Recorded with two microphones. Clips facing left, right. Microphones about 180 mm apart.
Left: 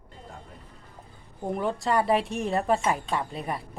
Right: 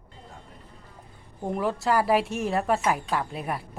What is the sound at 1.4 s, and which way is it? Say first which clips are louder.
A woman's voice: right 1 dB; centre (ahead or behind).